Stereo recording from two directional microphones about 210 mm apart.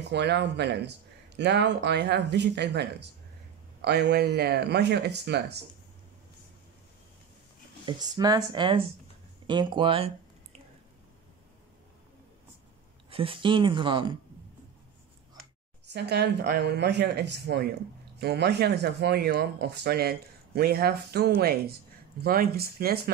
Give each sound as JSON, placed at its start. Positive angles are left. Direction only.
{"t": 0.1, "sound": "speech", "side_deg": -55}
{"t": 7.8, "sound": "speech", "side_deg": -20}
{"t": 13.1, "sound": "speech", "side_deg": -25}
{"t": 15.9, "sound": "speech", "side_deg": -55}